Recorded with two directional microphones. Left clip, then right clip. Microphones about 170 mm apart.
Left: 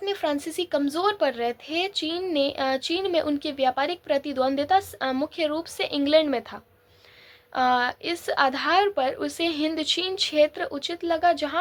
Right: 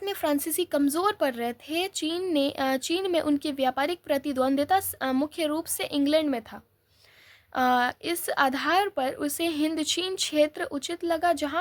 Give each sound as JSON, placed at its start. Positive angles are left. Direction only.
{"t": 0.0, "sound": "speech", "side_deg": -40}